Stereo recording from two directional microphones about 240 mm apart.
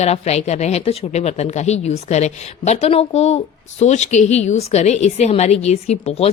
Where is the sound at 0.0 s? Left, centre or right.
Left.